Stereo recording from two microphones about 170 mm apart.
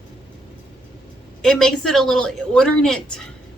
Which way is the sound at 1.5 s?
5° left (ahead or behind).